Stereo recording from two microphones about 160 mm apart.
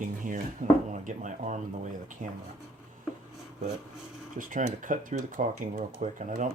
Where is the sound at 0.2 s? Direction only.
55° right (ahead or behind).